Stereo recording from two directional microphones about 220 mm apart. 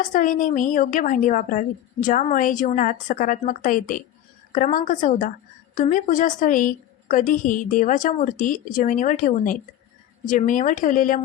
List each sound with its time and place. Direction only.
0.1 s a woman's voice: 35° left (ahead or behind)